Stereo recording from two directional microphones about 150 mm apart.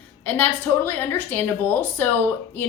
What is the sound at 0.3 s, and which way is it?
A woman's voice, 10° left (ahead or behind).